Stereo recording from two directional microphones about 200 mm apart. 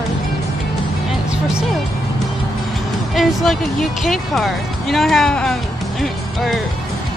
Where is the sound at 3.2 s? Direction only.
Centre (ahead or behind).